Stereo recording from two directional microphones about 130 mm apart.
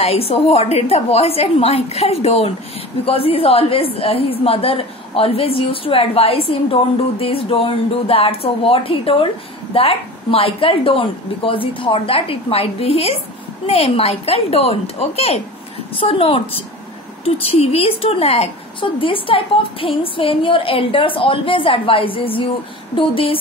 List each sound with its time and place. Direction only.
0.0 s a woman's voice: 50° left (ahead or behind)